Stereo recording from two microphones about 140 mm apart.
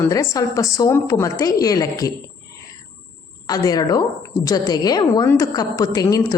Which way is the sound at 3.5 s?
25° left (ahead or behind).